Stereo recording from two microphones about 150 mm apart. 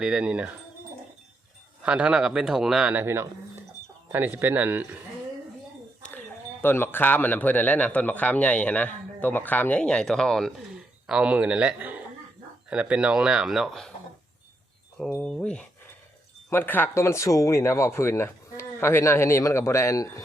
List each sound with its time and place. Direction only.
0.0 s a man's voice: 5° right (ahead or behind)
1.8 s a man's voice: 5° right (ahead or behind)
6.0 s speech: 10° left (ahead or behind)
14.9 s speech: 5° left (ahead or behind); by 20.2 s 20° left (ahead or behind)